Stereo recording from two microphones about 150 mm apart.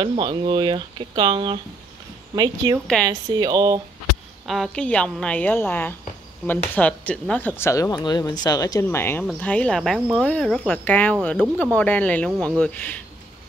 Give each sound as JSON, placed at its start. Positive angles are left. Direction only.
{"t": 0.0, "sound": "speech", "side_deg": -35}
{"t": 4.5, "sound": "speech", "side_deg": 5}